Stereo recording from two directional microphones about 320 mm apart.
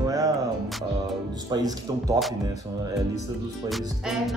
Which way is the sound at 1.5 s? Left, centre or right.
Centre.